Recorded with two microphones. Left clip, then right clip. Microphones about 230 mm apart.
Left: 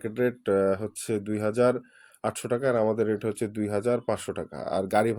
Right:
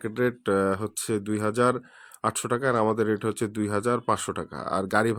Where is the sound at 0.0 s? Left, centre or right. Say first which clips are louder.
Right 1 dB; centre.